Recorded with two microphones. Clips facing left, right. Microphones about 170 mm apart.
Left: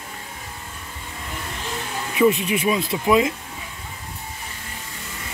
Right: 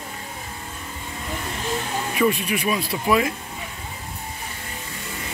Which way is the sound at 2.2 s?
20° left (ahead or behind).